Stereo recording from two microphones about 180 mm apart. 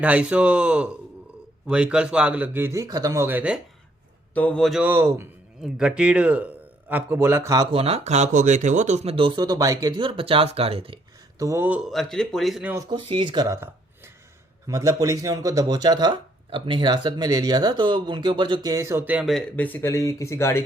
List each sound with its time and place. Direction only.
0.0 s speech: 5° right (ahead or behind)
4.4 s speech: 5° left (ahead or behind); by 7.8 s 20° right (ahead or behind)
7.8 s speech: 35° right (ahead or behind)
11.3 s speech: 15° right (ahead or behind)
12.7 s speech: 20° right (ahead or behind)
19.3 s speech: 5° left (ahead or behind)